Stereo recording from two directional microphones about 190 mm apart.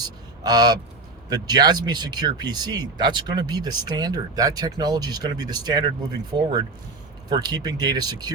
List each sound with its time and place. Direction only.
0.0 s speech: 20° right (ahead or behind)